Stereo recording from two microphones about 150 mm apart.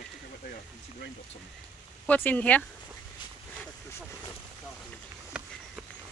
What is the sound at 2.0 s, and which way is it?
Speech, 10° left (ahead or behind).